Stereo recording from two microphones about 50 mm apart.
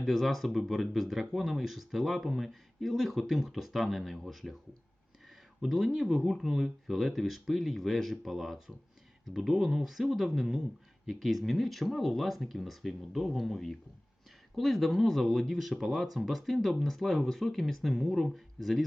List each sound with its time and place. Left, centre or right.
0.0 s speech: centre
5.6 s speech: centre